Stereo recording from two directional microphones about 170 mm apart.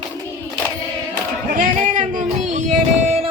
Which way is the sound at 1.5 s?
50° right (ahead or behind).